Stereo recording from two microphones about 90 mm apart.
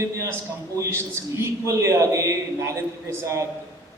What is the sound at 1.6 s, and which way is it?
A man's voice, 35° right (ahead or behind).